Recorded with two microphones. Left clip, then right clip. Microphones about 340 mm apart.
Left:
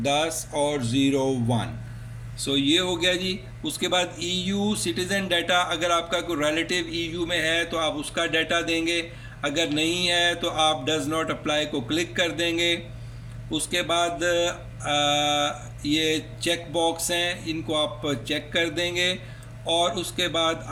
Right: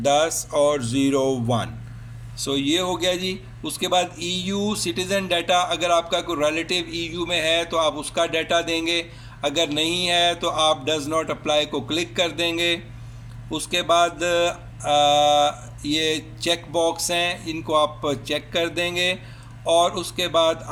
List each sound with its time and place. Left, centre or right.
0.0 s music: centre
2.4 s speech: centre